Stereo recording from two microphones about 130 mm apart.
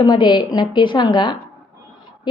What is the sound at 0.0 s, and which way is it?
A woman's voice, 35° left (ahead or behind).